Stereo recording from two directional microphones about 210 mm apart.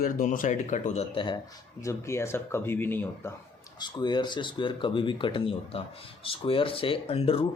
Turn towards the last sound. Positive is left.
turn(degrees=30)  # may be behind; listen again after turning